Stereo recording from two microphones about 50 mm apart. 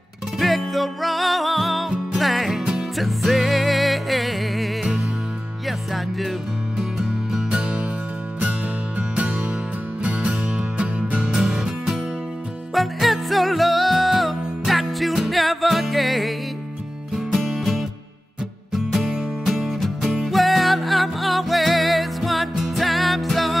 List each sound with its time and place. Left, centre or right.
0.4 s music: centre
6.8 s music: centre
8.4 s music: right
10.8 s music: right
12.7 s music: centre
17.4 s music: centre